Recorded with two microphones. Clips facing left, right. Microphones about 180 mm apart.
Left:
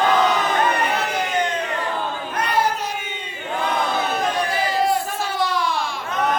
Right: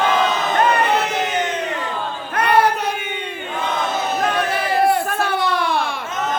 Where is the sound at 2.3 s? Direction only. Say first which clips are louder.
Right 6 dB; 60° right (ahead or behind).